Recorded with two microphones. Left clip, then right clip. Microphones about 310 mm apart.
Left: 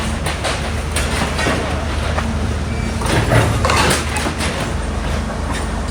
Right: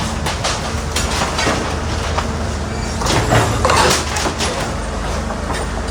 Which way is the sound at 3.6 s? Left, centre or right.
Right.